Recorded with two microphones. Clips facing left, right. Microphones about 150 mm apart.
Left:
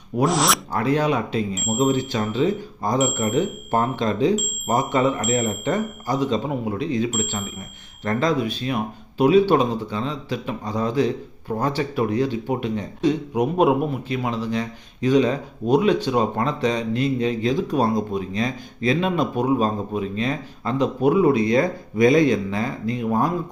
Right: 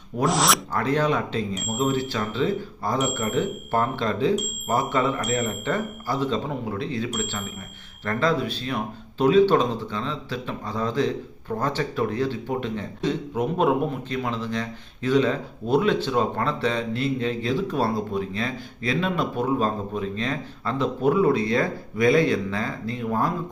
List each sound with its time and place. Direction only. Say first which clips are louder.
0.3 s speech: right 1 dB; centre (ahead or behind)
0.7 s speech: left 2 dB; 10° left (ahead or behind)